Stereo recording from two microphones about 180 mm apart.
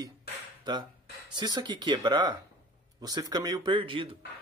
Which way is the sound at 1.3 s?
25° right (ahead or behind).